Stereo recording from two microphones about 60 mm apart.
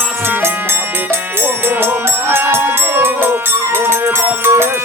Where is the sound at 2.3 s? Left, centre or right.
Right.